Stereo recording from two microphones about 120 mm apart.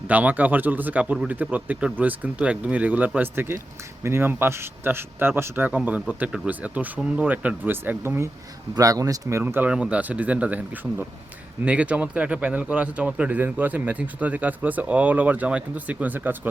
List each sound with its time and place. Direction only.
0.1 s a man's voice: 15° right (ahead or behind); by 9.4 s 30° right (ahead or behind)
9.4 s a man's voice: 15° right (ahead or behind)